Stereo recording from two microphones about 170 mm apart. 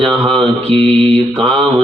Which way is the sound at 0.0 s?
30° right (ahead or behind).